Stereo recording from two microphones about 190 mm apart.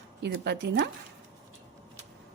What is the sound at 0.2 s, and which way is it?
Speech, 60° right (ahead or behind).